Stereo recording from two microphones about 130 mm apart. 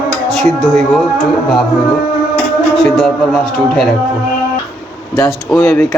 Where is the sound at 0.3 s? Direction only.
Centre (ahead or behind).